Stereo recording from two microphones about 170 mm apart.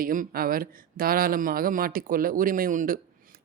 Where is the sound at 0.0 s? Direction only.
55° right (ahead or behind).